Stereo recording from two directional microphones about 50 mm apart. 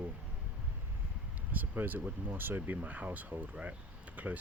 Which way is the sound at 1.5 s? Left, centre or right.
Right.